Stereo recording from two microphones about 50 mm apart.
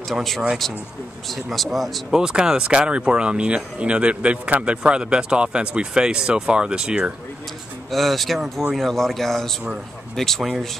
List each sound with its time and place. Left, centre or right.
1.3 s speech: centre
2.0 s speech: centre
7.9 s a man's voice: centre